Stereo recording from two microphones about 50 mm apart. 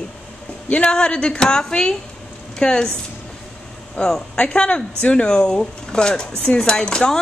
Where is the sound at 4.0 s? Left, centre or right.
Centre.